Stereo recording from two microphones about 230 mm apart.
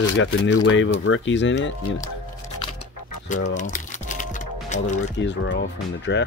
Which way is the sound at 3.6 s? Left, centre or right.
Left.